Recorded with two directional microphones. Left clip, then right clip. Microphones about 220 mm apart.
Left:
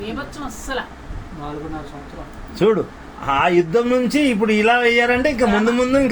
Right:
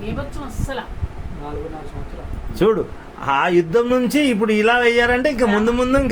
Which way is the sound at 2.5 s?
20° right (ahead or behind).